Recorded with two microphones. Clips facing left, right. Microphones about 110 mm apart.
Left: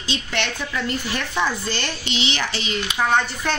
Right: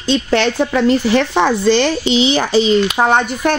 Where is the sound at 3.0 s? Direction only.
50° right (ahead or behind).